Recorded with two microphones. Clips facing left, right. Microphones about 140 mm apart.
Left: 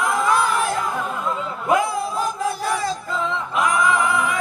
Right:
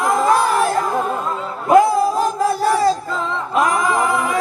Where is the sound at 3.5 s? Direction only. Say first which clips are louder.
Right 3 dB; 40° right (ahead or behind).